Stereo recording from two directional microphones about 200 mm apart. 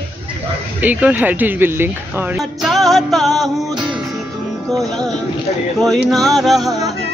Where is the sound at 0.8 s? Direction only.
10° right (ahead or behind).